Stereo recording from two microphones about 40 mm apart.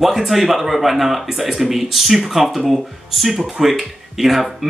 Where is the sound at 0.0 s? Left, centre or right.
Centre.